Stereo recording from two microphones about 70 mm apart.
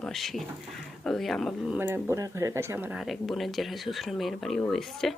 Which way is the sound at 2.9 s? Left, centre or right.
Centre.